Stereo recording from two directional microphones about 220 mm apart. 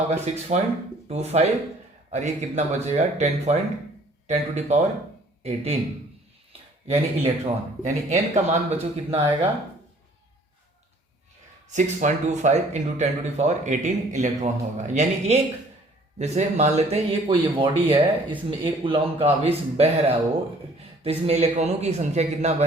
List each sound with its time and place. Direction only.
0.1 s speech: 30° right (ahead or behind)
6.9 s speech: 25° right (ahead or behind)
11.7 s speech: 35° right (ahead or behind)